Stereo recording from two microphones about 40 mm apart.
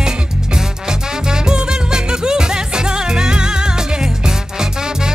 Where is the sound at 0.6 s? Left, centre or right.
Centre.